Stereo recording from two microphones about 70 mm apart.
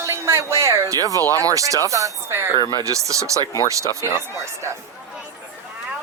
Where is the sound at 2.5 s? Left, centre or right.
Left.